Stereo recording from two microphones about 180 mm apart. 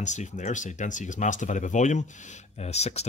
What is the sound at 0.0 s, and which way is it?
Speech, 40° left (ahead or behind).